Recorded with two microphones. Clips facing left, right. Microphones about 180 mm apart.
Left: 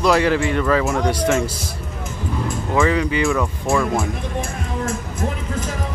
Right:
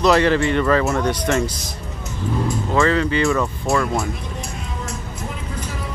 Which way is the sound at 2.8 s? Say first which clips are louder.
Even; 10° left (ahead or behind).